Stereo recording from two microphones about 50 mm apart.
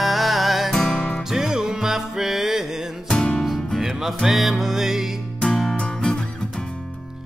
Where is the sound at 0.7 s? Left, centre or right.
Centre.